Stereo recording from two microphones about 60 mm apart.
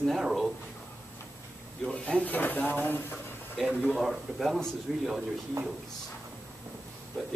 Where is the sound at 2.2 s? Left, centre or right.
Left.